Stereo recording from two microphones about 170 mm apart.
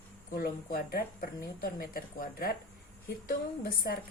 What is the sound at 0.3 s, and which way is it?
A woman's voice, 60° left (ahead or behind).